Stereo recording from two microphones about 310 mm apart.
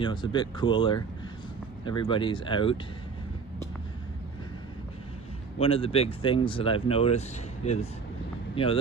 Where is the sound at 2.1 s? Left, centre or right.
Centre.